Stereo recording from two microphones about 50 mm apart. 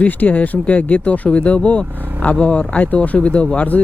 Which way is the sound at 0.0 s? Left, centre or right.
Left.